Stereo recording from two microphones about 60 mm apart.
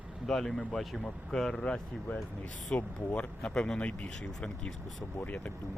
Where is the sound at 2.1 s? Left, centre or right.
Left.